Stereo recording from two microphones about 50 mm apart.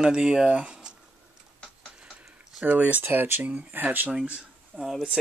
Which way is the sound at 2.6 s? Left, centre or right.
Right.